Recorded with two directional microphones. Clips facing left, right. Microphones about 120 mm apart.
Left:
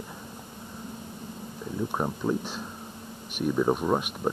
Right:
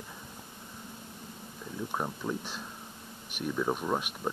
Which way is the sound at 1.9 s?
30° left (ahead or behind).